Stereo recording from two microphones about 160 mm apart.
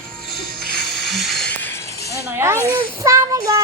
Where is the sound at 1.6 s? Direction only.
15° left (ahead or behind).